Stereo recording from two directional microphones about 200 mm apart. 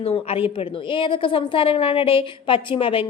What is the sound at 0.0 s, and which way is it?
A woman's voice, 30° left (ahead or behind).